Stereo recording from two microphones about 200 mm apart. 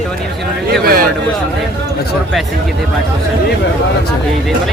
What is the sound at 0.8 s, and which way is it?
Speech, 50° right (ahead or behind).